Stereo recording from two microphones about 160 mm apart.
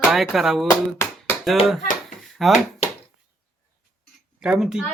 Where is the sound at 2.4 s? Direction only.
Centre (ahead or behind).